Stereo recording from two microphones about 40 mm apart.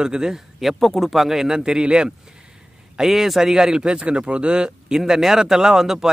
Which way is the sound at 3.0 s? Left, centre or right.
Centre.